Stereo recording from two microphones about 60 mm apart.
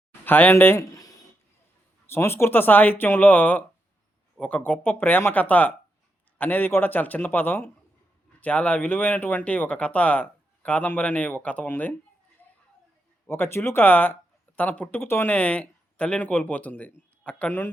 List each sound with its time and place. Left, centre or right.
0.3 s speech: left
0.8 s a sound: left
2.0 s speech: left
13.2 s speech: left
15.0 s speech: left
15.3 s speech: left